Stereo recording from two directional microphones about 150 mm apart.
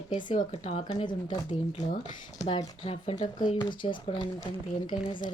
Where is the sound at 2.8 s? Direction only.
40° left (ahead or behind).